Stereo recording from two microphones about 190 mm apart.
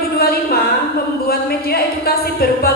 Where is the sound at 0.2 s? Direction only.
55° left (ahead or behind).